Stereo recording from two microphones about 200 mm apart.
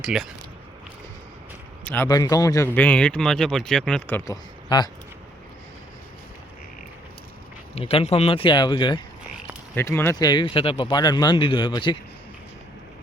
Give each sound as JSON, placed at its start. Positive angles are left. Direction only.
{"t": 0.0, "sound": "speech", "side_deg": 0}
{"t": 1.8, "sound": "speech", "side_deg": 10}
{"t": 4.7, "sound": "speech", "side_deg": 25}
{"t": 7.8, "sound": "speech", "side_deg": 30}
{"t": 9.7, "sound": "speech", "side_deg": 10}